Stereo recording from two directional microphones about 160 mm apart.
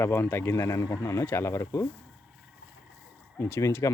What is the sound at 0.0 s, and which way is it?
Speech, 15° left (ahead or behind).